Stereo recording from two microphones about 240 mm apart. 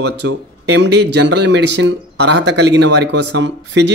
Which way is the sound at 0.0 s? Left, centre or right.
Right.